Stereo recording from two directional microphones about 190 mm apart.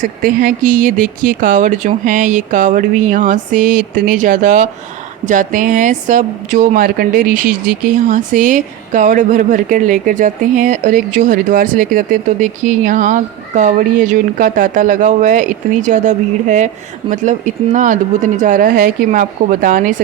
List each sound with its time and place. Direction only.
0.0 s speech: 50° right (ahead or behind)